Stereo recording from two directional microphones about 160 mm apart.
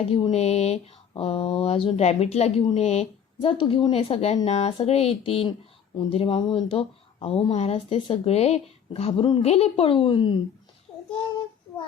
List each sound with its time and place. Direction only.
0.0 s speech: 35° left (ahead or behind)